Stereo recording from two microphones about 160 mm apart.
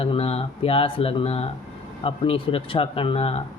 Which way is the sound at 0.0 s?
35° left (ahead or behind).